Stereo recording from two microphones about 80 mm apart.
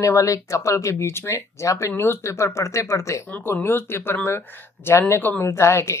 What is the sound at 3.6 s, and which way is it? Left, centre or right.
Speech, left.